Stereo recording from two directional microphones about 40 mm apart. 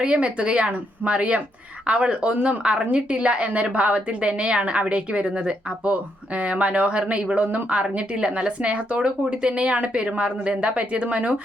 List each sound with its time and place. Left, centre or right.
0.0 s a woman's voice: right